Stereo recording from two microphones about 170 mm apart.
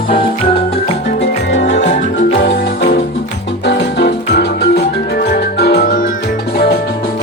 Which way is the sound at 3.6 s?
85° left.